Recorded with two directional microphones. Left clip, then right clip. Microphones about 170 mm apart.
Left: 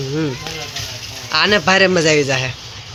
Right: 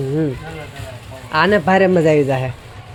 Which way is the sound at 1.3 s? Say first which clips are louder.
Even; 25° right (ahead or behind).